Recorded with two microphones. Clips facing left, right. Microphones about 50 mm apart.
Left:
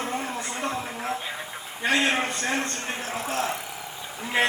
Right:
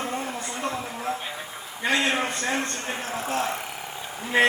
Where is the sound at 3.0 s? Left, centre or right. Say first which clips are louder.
Right 1 dB; right.